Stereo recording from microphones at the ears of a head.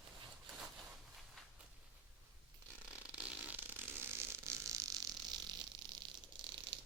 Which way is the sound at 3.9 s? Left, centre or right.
Right.